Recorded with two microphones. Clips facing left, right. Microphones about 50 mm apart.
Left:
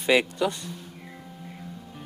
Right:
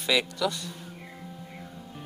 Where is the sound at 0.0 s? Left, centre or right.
Left.